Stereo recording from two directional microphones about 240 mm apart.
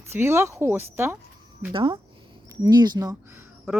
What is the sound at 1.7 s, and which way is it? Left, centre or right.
Speech, right.